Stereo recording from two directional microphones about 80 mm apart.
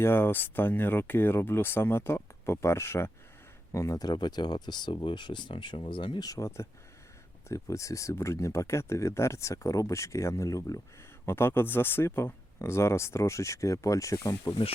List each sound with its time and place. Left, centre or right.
0.0 s speech: left
6.2 s speech: left
11.3 s speech: left